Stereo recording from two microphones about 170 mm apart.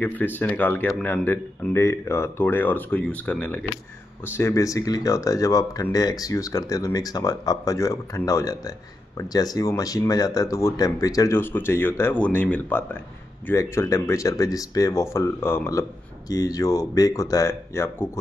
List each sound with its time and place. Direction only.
0.0 s speech: 10° left (ahead or behind)